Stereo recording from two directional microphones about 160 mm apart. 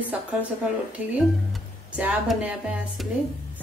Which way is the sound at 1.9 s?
5° right (ahead or behind).